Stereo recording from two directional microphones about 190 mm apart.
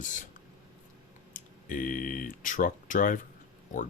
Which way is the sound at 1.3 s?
45° left (ahead or behind).